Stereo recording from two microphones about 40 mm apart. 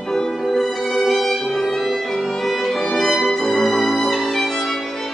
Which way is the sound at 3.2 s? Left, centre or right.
Centre.